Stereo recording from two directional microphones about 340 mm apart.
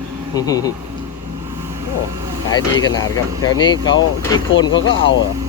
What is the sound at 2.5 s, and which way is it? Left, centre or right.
Speech, centre.